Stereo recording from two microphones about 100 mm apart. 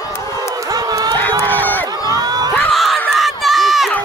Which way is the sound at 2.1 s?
40° right (ahead or behind).